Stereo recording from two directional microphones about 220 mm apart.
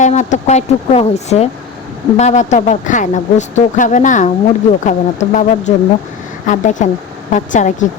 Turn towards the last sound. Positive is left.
turn(degrees=35)  # may be behind; listen again after turning